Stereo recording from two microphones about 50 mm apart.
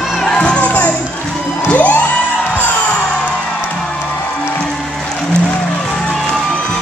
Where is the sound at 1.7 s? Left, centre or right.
Left.